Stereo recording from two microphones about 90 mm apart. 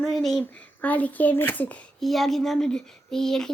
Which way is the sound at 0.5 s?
20° left (ahead or behind).